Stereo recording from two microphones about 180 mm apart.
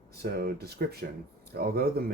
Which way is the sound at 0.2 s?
60° right (ahead or behind).